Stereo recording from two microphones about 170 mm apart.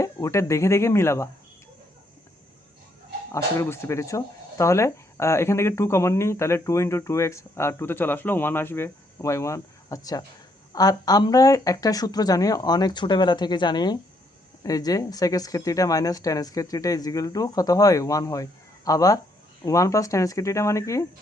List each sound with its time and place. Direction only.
0.0 s speech: 20° left (ahead or behind)
3.3 s speech: 15° left (ahead or behind)